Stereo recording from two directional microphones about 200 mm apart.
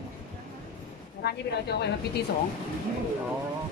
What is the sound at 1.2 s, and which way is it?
A woman's voice, 55° left (ahead or behind).